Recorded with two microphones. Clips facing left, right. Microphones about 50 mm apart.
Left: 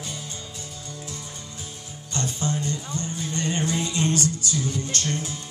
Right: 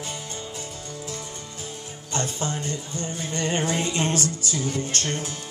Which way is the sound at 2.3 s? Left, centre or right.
Right.